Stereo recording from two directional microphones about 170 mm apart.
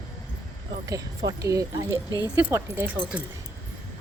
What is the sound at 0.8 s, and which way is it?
Speech, 20° right (ahead or behind).